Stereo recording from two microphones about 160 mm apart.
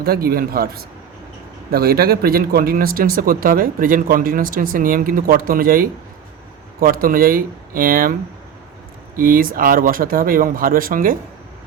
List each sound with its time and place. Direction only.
0.0 s speech: 70° right (ahead or behind)
1.7 s speech: 70° right (ahead or behind)
9.1 s speech: 60° right (ahead or behind)